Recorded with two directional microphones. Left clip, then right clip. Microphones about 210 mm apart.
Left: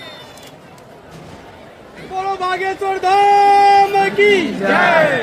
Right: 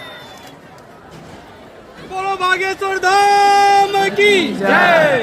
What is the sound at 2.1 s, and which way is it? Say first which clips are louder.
Speech: even; 40° right (ahead or behind).